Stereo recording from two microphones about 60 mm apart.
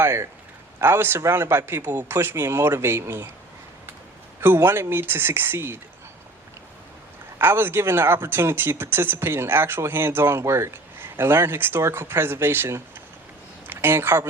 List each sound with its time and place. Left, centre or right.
0.0 s speech: right
4.4 s speech: right
7.3 s speech: right